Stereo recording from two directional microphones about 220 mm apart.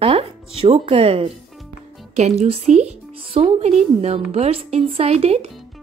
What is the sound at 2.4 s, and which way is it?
Speech, 30° right (ahead or behind).